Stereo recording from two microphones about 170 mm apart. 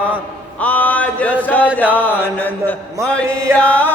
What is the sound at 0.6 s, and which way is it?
Mantra, 10° left (ahead or behind).